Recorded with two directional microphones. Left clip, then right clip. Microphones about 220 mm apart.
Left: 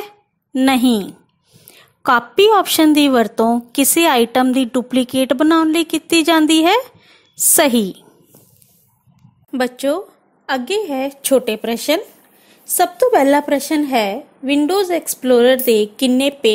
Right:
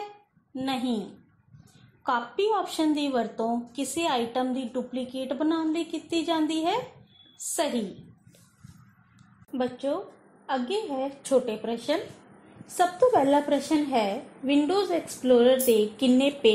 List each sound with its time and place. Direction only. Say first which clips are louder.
0.6 s a woman's voice: left 15 dB; 70° left (ahead or behind)
2.0 s a woman's voice: left 14 dB; 75° left (ahead or behind)
3.1 s a woman's voice: left 13 dB; 40° left (ahead or behind)
3.7 s a woman's voice: left 16 dB; 70° left (ahead or behind)
4.5 s a woman's voice: left 14 dB; 40° left (ahead or behind)
4.9 s a woman's voice: left 19 dB; 70° left (ahead or behind)
9.5 s a woman's voice: left 11 dB; 40° left (ahead or behind)